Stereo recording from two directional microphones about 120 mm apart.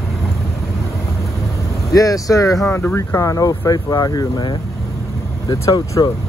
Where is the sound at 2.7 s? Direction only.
15° left (ahead or behind).